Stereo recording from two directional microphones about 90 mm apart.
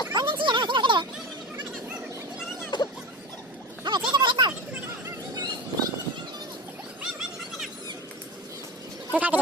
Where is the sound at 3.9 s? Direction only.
65° right (ahead or behind).